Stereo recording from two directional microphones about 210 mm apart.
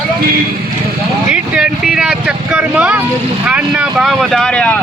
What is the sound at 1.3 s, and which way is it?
Speech, 5° right (ahead or behind).